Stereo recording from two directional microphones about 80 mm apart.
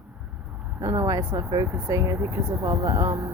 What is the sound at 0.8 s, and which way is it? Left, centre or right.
A woman's voice, right.